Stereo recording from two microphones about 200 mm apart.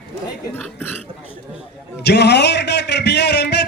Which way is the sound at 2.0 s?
55° left (ahead or behind).